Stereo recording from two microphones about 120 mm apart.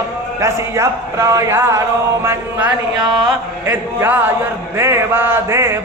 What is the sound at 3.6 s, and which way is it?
Speech, 15° right (ahead or behind).